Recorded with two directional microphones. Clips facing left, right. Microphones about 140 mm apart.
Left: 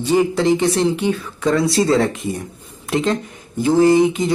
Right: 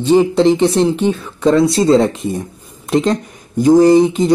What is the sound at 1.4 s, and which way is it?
Speech, 25° right (ahead or behind).